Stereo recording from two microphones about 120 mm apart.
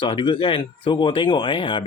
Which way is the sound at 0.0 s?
40° left (ahead or behind).